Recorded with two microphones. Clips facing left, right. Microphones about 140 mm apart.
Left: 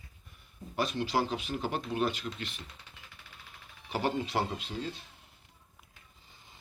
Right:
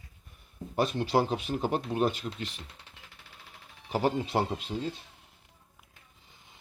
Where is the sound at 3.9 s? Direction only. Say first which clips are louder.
Right 3 dB; 45° right (ahead or behind).